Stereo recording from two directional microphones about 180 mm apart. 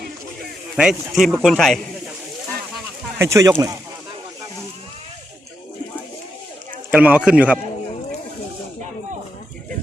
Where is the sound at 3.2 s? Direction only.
15° right (ahead or behind).